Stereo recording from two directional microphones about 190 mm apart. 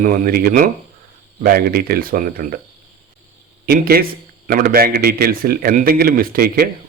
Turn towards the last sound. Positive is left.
turn(degrees=-50)  # may be behind; listen again after turning